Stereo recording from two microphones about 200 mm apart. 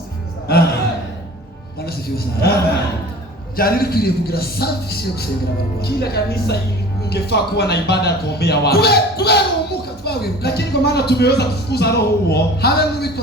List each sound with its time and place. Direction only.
1.9 s a man's voice: 50° left (ahead or behind)
3.6 s a man's voice: 50° left (ahead or behind)